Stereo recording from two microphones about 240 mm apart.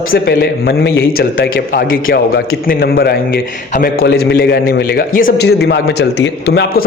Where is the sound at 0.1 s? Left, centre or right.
Left.